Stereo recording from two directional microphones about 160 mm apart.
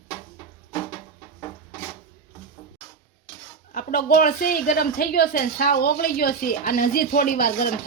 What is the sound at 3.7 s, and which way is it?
A woman's voice, 60° left (ahead or behind).